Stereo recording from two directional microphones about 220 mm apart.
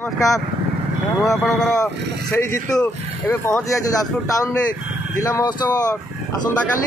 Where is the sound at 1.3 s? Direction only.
10° left (ahead or behind).